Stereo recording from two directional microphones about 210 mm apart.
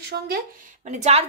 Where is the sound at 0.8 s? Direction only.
35° right (ahead or behind).